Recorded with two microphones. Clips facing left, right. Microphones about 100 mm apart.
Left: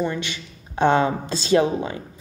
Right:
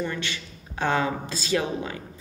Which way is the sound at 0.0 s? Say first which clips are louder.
Left 4 dB; 20° left (ahead or behind).